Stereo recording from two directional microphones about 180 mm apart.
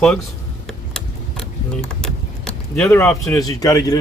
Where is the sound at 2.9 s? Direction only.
15° left (ahead or behind).